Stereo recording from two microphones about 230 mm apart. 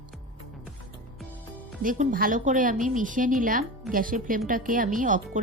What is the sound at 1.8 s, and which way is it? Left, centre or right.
A woman's voice, right.